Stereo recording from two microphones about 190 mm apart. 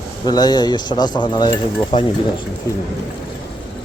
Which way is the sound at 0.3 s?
20° left (ahead or behind).